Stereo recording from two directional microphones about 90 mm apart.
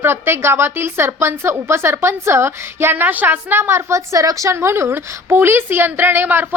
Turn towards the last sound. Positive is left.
turn(degrees=-25)  # may be behind; listen again after turning